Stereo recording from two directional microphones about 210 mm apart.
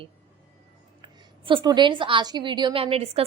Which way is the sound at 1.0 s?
20° right (ahead or behind).